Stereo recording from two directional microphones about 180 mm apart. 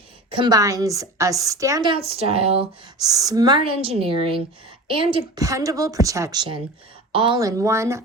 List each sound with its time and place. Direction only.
0.3 s a woman's voice: 25° right (ahead or behind)
3.0 s a woman's voice: 20° right (ahead or behind)